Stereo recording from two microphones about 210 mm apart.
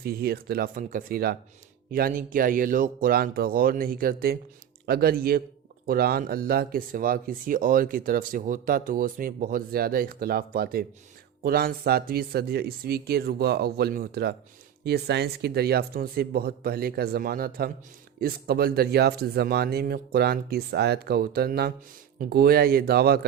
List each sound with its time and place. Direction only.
0.0 s speech: 45° right (ahead or behind)